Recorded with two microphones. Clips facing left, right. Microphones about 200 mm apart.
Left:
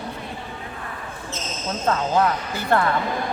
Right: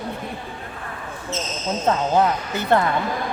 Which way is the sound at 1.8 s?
20° right (ahead or behind).